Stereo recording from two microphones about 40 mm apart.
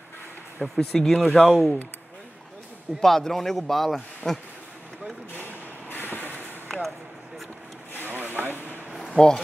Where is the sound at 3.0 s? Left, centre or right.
Centre.